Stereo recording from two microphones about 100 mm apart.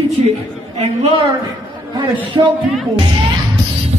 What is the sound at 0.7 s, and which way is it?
Speech, 90° right.